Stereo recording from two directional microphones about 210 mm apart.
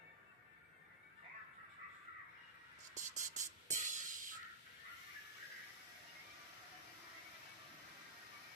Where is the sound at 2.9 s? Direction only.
35° right (ahead or behind).